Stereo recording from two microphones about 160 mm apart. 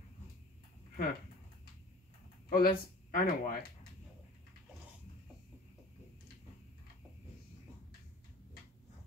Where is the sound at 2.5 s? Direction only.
65° left (ahead or behind).